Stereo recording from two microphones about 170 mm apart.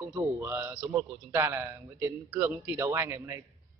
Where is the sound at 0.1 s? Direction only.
15° right (ahead or behind).